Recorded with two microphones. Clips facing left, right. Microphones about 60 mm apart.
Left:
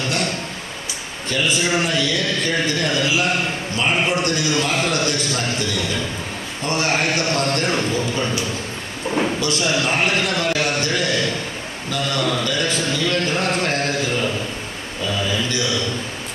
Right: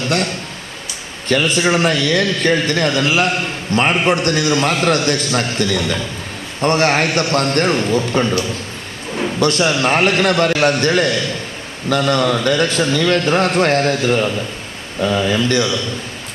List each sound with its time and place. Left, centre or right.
1.3 s a man's voice: right
9.4 s a man's voice: right